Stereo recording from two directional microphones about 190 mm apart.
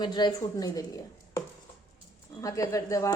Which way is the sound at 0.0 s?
20° left (ahead or behind).